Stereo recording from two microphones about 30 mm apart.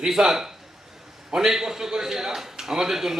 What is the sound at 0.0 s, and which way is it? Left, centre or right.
Speech, centre.